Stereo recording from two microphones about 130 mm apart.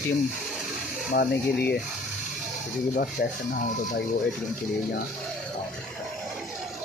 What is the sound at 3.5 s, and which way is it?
Speech, 85° left.